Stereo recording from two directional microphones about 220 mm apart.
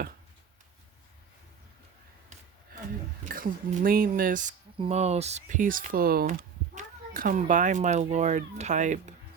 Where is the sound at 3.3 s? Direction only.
40° right (ahead or behind).